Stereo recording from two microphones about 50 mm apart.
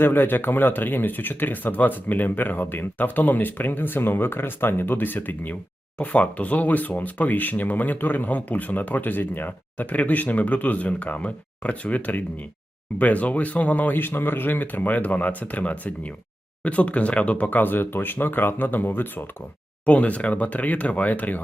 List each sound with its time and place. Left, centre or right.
0.0 s speech: left
19.8 s speech: left